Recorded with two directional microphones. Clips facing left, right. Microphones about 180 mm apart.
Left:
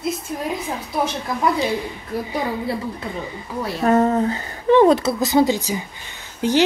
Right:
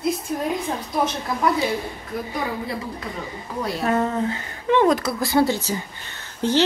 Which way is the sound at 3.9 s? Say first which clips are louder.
Left 6 dB; 35° left (ahead or behind).